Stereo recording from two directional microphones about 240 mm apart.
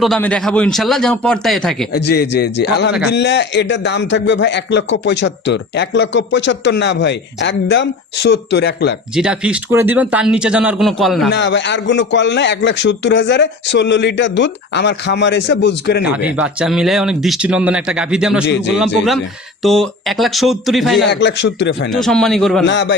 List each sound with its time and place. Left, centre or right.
0.0 s speech: centre
1.9 s a man's voice: left
9.1 s speech: centre
11.3 s a man's voice: left
16.3 s speech: centre
19.6 s speech: centre
21.1 s a man's voice: left
21.9 s speech: centre
22.6 s a man's voice: left